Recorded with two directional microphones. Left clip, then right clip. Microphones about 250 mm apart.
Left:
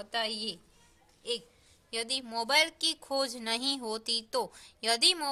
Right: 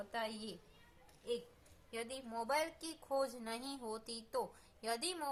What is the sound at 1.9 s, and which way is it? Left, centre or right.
A woman's voice, left.